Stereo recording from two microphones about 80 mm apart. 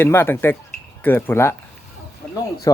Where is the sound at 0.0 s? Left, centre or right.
Left.